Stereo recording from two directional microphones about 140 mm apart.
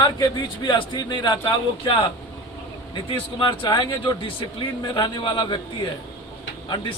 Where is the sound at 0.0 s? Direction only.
30° left (ahead or behind).